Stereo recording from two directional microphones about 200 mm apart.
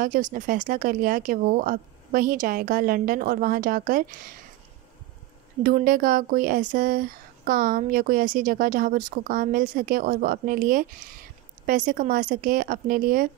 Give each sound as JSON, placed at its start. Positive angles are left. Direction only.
{"t": 0.0, "sound": "speech", "side_deg": -40}
{"t": 5.6, "sound": "speech", "side_deg": -45}